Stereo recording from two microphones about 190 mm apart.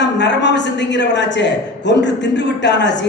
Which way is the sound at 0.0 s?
65° left (ahead or behind).